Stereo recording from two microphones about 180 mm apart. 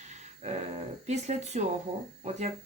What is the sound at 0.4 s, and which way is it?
Dog, 35° right (ahead or behind).